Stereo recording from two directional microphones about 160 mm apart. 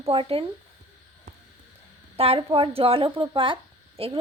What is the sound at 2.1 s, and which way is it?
Speech, 40° right (ahead or behind).